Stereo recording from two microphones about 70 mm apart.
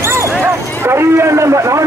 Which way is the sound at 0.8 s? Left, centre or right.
Right.